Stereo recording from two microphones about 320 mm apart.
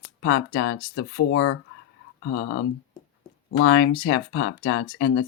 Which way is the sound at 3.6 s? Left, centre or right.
Left.